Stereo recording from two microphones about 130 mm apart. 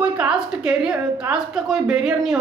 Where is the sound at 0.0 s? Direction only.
10° right (ahead or behind).